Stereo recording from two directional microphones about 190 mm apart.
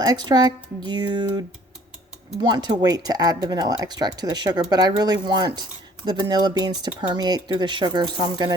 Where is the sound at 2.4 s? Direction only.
25° right (ahead or behind).